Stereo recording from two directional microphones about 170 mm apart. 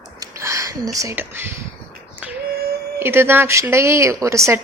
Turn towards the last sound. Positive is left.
turn(degrees=-15)  # may be behind; listen again after turning